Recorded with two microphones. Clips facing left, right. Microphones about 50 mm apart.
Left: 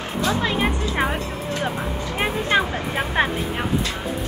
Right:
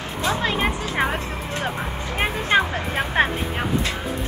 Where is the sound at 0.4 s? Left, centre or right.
Centre.